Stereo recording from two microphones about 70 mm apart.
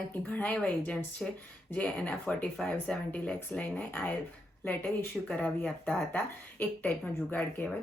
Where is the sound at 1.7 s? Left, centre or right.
Left.